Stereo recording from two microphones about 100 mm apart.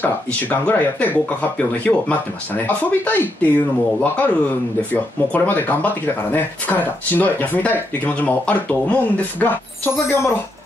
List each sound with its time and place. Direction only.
0.0 s speech: 15° left (ahead or behind)